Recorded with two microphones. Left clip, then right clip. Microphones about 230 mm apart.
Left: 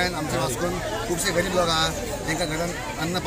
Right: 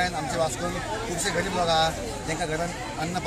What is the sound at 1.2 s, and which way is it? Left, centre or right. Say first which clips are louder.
Speech: left 2 dB; centre.